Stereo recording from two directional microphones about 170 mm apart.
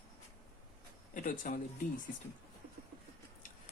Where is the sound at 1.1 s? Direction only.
50° left (ahead or behind).